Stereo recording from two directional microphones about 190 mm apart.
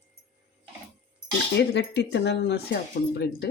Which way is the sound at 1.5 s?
60° left (ahead or behind).